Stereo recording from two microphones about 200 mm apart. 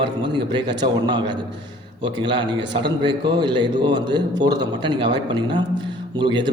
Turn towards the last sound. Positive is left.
turn(degrees=-25)  # may be behind; listen again after turning